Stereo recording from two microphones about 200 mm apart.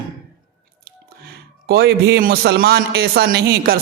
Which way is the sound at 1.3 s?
55° right (ahead or behind).